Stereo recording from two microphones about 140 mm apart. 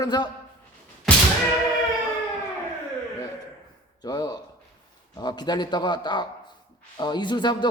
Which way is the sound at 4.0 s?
30° left (ahead or behind).